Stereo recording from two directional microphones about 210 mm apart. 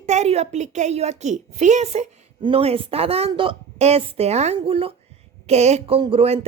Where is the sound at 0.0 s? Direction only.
30° right (ahead or behind).